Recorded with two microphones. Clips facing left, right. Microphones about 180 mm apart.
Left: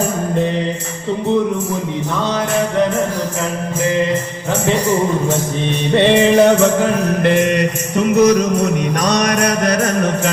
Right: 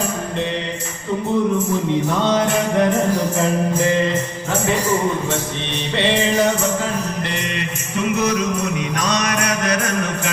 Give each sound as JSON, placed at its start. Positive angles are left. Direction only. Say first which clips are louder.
{"t": 5.9, "sound": "music", "louder": "left 7 dB", "side_deg": 55}
{"t": 7.3, "sound": "music", "louder": "left 11 dB", "side_deg": 50}